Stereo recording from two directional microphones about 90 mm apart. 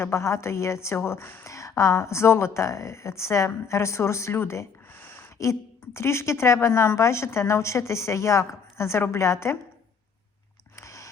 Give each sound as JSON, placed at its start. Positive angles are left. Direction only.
{"t": 0.0, "sound": "speech", "side_deg": 30}
{"t": 1.5, "sound": "speech", "side_deg": 35}
{"t": 10.8, "sound": "a sound", "side_deg": 35}